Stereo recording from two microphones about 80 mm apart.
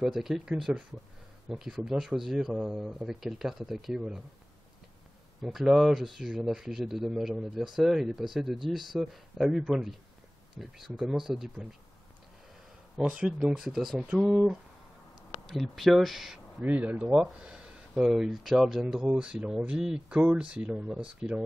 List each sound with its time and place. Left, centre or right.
0.0 s speech: centre
5.4 s speech: centre
12.9 s speech: centre
15.4 s speech: centre
16.6 s speech: centre